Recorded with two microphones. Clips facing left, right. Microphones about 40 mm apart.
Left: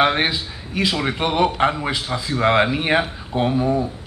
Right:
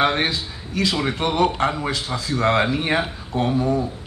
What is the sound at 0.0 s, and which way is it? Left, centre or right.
Speech, centre.